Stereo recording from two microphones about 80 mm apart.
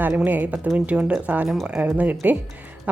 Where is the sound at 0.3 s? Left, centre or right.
Right.